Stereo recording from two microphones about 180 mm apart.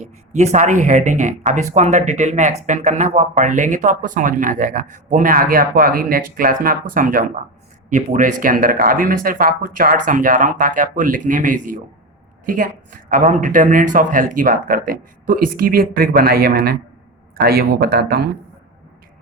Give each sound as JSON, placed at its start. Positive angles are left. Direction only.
{"t": 0.0, "sound": "speech", "side_deg": -40}